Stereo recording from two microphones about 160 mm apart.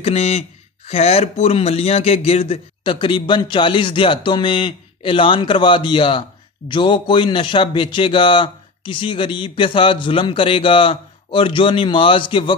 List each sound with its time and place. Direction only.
0.0 s speech: 40° left (ahead or behind)